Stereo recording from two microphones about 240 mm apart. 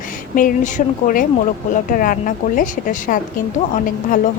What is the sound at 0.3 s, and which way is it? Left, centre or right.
A woman's voice, left.